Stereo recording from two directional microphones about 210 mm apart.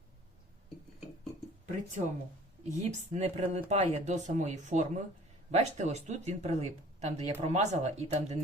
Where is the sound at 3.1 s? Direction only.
30° right (ahead or behind).